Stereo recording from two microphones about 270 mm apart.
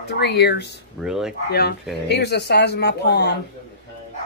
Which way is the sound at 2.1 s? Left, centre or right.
Left.